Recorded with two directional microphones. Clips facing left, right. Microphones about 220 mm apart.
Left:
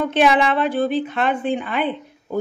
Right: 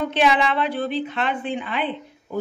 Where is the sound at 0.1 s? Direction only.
50° left (ahead or behind).